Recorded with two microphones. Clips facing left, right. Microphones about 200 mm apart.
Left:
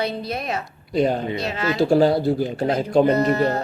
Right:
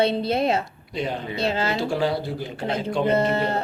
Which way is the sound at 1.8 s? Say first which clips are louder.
Left 7 dB; 40° left (ahead or behind).